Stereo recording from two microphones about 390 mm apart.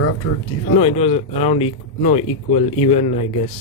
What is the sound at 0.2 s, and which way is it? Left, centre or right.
Speech, left.